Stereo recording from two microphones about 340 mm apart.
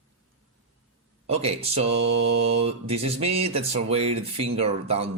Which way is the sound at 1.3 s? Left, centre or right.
Centre.